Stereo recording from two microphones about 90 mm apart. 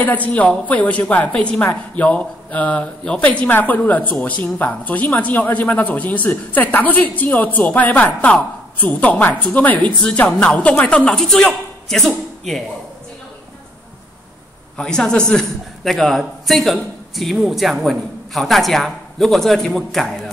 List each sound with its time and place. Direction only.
0.0 s a woman's voice: 15° left (ahead or behind)
14.8 s a man's voice: 10° left (ahead or behind)